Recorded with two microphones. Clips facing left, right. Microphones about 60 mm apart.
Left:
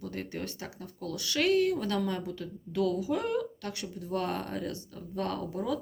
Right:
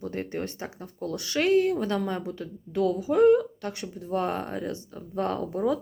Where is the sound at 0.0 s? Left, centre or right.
Right.